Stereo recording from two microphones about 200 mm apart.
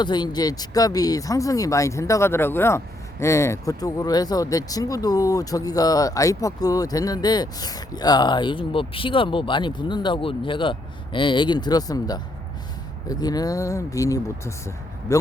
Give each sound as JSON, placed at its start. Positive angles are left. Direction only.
{"t": 0.0, "sound": "speech", "side_deg": 20}